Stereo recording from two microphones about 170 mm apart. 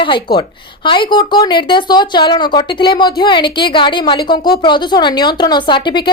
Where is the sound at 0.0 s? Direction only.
30° left (ahead or behind).